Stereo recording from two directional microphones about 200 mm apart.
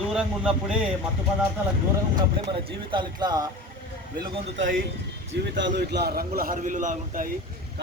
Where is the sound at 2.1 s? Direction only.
25° right (ahead or behind).